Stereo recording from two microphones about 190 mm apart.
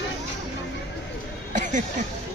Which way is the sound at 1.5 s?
40° right (ahead or behind).